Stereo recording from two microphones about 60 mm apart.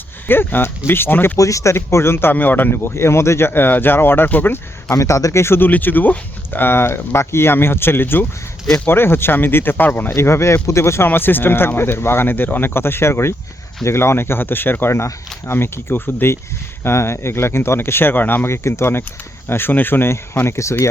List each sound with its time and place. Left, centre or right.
0.3 s speech: left
1.4 s speech: left
1.7 s speech: left
2.3 s speech: left
4.9 s speech: left
8.6 s speech: centre
8.9 s speech: left
10.1 s speech: left
11.1 s speech: left
18.4 s speech: left